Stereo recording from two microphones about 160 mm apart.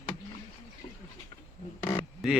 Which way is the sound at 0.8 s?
45° left (ahead or behind).